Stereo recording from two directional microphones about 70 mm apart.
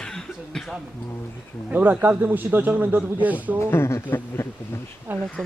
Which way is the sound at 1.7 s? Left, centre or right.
Right.